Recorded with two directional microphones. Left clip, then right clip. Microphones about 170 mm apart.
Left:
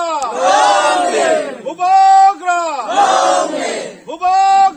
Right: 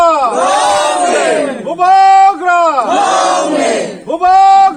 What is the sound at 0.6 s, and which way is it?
Crowd, 5° right (ahead or behind).